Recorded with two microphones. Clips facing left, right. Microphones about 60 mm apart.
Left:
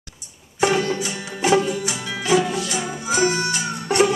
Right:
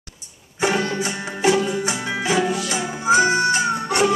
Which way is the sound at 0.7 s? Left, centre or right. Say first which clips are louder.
Even; right.